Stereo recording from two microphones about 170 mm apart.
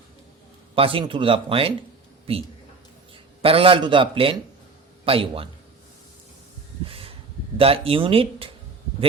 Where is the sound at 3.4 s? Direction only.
35° right (ahead or behind).